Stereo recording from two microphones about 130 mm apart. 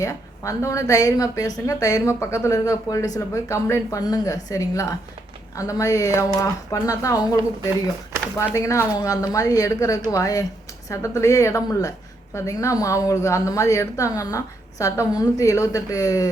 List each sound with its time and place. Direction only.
0.0 s a woman's voice: 25° left (ahead or behind)
8.5 s a woman's voice: 25° left (ahead or behind)